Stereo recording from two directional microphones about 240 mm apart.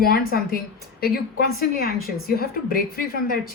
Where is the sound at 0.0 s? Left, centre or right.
Left.